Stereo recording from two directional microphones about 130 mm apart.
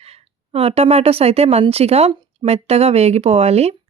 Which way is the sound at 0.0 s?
50° right (ahead or behind).